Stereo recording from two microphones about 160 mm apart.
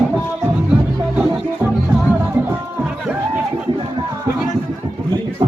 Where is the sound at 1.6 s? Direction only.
15° right (ahead or behind).